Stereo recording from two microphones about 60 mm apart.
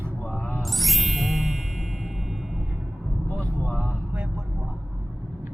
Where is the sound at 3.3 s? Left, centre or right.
Centre.